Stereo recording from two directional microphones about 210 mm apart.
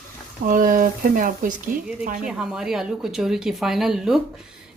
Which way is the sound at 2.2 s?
5° right (ahead or behind).